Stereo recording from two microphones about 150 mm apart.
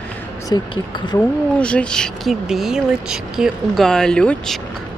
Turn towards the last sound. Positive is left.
turn(degrees=5)  # may be behind; listen again after turning